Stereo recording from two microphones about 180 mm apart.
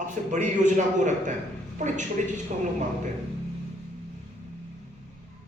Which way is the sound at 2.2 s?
45° right (ahead or behind).